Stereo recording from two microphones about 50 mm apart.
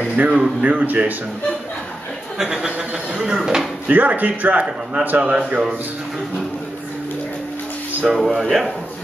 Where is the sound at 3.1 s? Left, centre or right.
Centre.